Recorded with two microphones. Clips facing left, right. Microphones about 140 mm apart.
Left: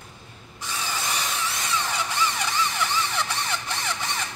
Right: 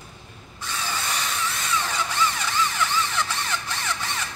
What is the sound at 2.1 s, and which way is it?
Vehicle, 15° left (ahead or behind).